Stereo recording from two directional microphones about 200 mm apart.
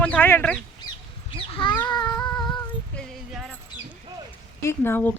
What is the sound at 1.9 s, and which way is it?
Cat, 20° left (ahead or behind).